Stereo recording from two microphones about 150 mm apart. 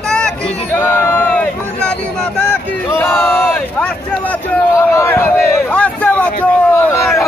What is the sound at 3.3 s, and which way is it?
Speech, 15° left (ahead or behind).